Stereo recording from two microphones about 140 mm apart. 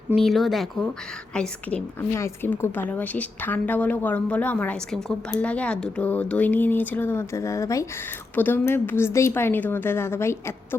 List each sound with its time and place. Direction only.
0.2 s a woman's voice: centre (ahead or behind); by 10.8 s 20° left (ahead or behind)